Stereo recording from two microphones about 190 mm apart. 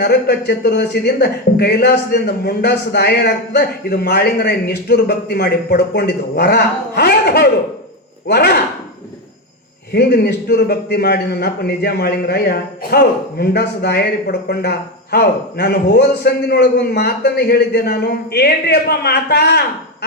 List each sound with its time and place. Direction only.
0.0 s a man's voice: 60° left (ahead or behind)
9.9 s a man's voice: 60° left (ahead or behind)